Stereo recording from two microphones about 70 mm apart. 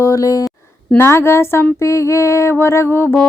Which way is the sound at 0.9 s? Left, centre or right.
Left.